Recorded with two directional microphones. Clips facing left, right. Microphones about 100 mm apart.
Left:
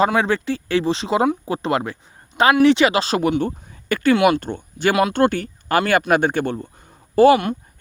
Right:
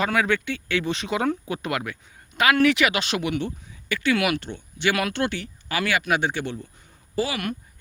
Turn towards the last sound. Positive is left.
turn(degrees=30)  # may be behind; listen again after turning